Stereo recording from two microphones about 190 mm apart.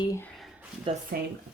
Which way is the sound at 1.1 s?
55° right (ahead or behind).